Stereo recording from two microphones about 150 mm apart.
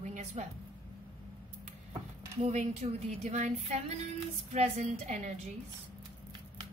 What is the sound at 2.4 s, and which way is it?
A woman's voice, 50° right (ahead or behind).